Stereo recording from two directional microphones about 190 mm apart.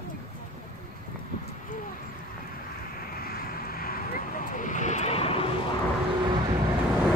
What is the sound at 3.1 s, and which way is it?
Vehicle, 50° left (ahead or behind).